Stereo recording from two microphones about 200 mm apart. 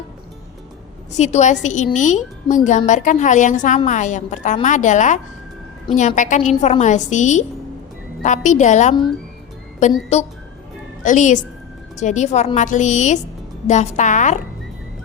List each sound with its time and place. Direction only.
1.1 s a woman's voice: 35° left (ahead or behind)
11.0 s a woman's voice: 40° left (ahead or behind)